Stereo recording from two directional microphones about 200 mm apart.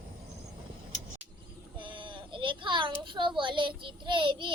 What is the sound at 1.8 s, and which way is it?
Speech, 25° right (ahead or behind).